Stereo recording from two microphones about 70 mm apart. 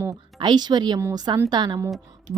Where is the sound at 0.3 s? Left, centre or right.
Right.